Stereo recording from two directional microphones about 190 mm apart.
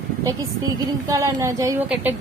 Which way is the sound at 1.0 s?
15° right (ahead or behind).